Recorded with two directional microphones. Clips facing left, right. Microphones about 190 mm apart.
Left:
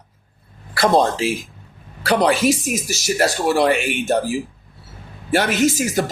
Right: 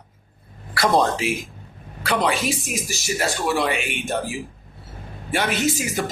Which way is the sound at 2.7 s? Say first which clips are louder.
Left 5 dB; 40° left (ahead or behind).